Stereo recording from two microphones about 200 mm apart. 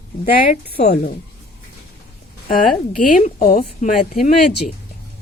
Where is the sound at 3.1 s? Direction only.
40° left (ahead or behind).